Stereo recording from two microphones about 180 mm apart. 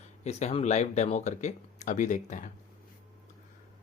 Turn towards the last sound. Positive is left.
turn(degrees=45)  # may be behind; listen again after turning